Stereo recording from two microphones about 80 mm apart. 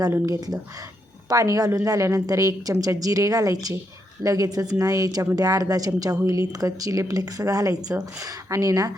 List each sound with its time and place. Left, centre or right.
0.3 s a woman's voice: right